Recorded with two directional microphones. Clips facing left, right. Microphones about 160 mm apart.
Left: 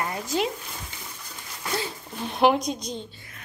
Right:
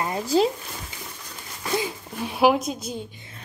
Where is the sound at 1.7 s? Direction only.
10° right (ahead or behind).